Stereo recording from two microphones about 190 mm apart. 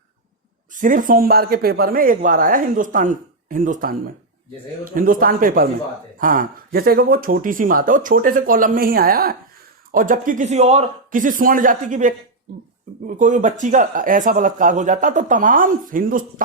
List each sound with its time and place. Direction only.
0.7 s speech: 45° right (ahead or behind)